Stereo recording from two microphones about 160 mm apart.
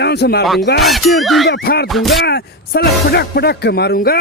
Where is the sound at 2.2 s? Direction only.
80° left.